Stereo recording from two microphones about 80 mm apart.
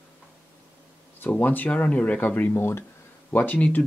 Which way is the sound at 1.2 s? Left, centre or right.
Left.